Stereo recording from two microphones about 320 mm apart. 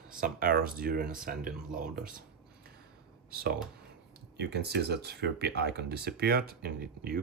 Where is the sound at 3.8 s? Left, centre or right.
Right.